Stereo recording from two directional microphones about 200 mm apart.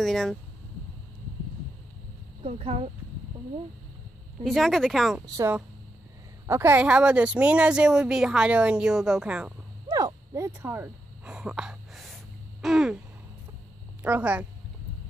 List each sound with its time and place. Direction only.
0.0 s speech: centre (ahead or behind)
2.4 s speech: 30° right (ahead or behind)
4.4 s speech: centre (ahead or behind)
5.2 s a woman's voice: 20° right (ahead or behind)
9.8 s a sound: 15° right (ahead or behind); by 12.2 s centre (ahead or behind)
12.6 s speech: centre (ahead or behind)
14.0 s a woman's voice: 5° right (ahead or behind)